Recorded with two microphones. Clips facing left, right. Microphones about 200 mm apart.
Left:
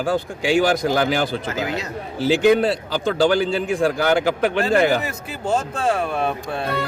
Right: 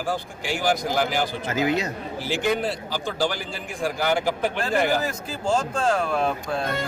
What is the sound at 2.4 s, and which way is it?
A man's voice, 70° left (ahead or behind).